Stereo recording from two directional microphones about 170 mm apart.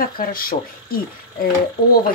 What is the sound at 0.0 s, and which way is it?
Speech, 60° left (ahead or behind).